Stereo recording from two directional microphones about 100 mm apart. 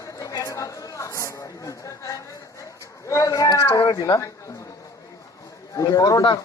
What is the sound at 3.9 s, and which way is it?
Speech, 50° left (ahead or behind).